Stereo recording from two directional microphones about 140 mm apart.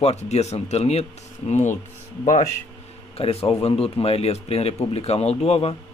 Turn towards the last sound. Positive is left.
turn(degrees=45)  # may be behind; listen again after turning